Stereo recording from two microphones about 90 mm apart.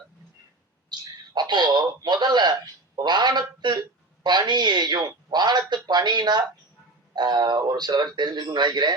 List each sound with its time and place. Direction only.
0.9 s a man's voice: 50° right (ahead or behind)